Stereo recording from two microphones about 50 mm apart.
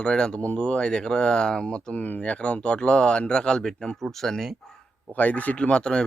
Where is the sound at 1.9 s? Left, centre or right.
Left; by 4.4 s centre.